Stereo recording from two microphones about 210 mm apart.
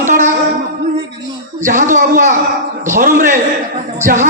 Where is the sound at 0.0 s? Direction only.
35° right (ahead or behind).